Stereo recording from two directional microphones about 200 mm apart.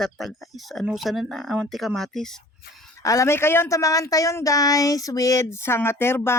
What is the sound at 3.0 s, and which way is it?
Speech, 15° left (ahead or behind).